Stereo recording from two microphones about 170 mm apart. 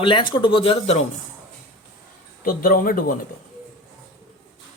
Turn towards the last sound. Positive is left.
turn(degrees=55)  # may be behind; listen again after turning